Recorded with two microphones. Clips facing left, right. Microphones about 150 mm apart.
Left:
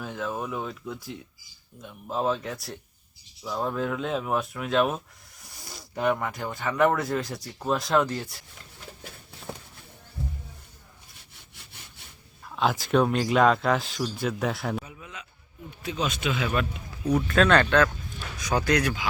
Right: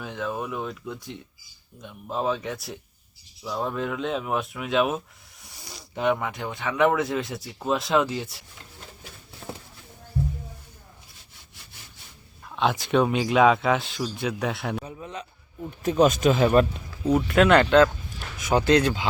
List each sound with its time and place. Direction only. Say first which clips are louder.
0.0 s speech: right 1 dB; centre (ahead or behind)
12.5 s a sound: right 1 dB; centre (ahead or behind)
12.8 s speech: even; centre (ahead or behind)
14.8 s a sound: right 7 dB; 35° right (ahead or behind)
15.8 s speech: right 10 dB; 45° right (ahead or behind)
17.1 s speech: right 3 dB; 20° right (ahead or behind)